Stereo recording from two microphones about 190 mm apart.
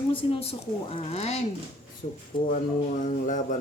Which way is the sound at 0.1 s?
30° left (ahead or behind).